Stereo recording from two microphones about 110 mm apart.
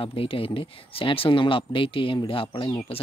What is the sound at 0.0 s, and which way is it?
Speech, 55° left (ahead or behind).